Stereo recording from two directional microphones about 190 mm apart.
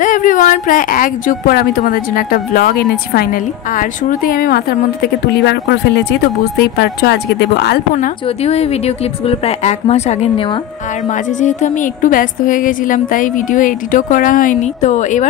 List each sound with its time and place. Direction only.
0.0 s speech: 45° left (ahead or behind)
8.4 s a woman's voice: 35° left (ahead or behind)
11.1 s speech: 40° left (ahead or behind)